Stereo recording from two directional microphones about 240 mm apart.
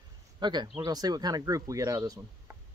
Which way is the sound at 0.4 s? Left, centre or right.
Centre.